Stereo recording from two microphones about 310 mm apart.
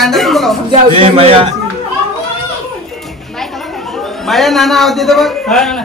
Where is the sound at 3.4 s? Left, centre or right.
Centre.